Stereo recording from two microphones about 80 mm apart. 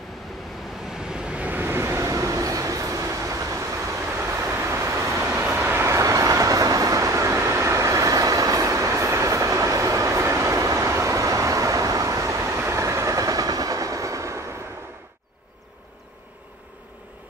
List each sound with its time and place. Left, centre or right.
1.0 s vehicle: centre; by 2.0 s right
2.0 s train: right